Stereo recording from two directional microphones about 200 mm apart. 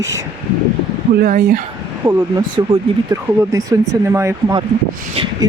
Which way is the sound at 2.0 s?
20° right (ahead or behind).